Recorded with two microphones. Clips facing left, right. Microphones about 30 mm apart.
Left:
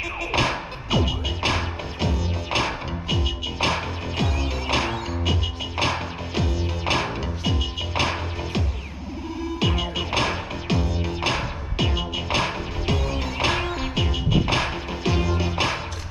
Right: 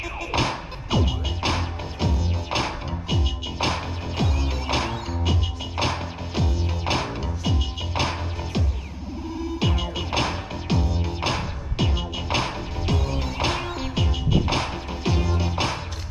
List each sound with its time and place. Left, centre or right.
0.0 s music: centre
9.7 s music: centre